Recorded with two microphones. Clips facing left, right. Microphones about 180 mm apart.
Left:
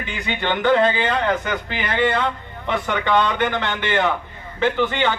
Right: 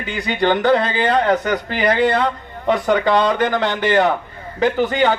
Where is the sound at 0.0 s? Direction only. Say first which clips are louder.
Right 6 dB; 40° right (ahead or behind).